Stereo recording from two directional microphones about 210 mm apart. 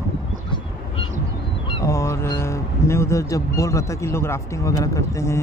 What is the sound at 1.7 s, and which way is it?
Speech, 15° left (ahead or behind).